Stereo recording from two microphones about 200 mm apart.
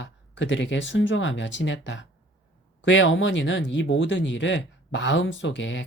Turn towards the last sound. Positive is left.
turn(degrees=65)  # may be behind; listen again after turning